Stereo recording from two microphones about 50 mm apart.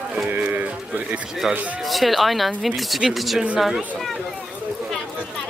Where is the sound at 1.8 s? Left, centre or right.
Centre.